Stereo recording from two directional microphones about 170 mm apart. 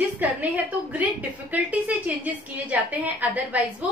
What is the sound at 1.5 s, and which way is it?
A woman's voice, 10° right (ahead or behind).